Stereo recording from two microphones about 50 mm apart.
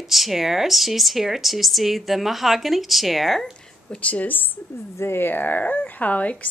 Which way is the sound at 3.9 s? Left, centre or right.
Left.